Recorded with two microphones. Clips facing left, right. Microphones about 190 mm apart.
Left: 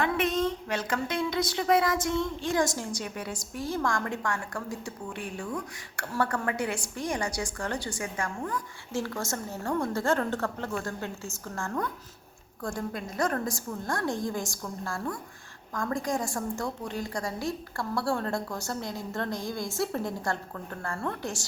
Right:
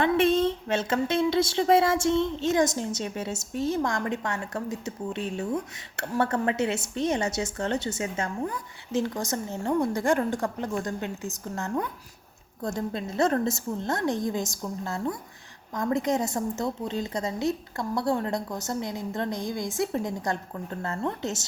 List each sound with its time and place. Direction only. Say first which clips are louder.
0.0 s speech: right 5 dB; 25° right (ahead or behind)